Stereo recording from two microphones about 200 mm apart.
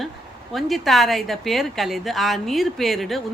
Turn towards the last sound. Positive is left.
turn(degrees=0)  # may be behind; listen again after turning